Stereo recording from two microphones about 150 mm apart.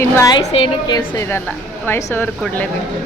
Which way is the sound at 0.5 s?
35° left (ahead or behind).